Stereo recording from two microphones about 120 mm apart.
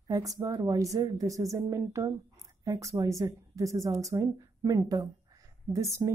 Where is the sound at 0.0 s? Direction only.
30° right (ahead or behind).